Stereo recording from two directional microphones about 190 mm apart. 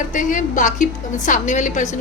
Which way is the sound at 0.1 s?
40° left (ahead or behind).